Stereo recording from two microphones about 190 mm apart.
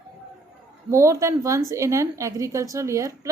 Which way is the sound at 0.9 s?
15° right (ahead or behind).